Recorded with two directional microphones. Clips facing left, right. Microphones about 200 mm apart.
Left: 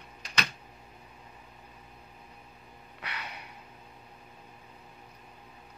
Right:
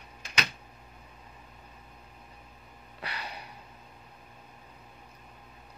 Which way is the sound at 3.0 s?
35° right (ahead or behind).